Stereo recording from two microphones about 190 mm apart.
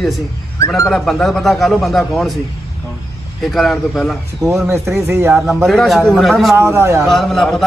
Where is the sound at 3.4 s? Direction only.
Centre (ahead or behind).